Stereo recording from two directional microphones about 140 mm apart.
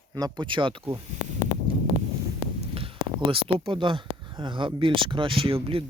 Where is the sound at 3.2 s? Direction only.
40° right (ahead or behind).